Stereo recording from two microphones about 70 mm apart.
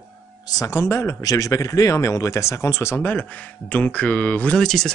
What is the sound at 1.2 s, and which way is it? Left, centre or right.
Speech, left.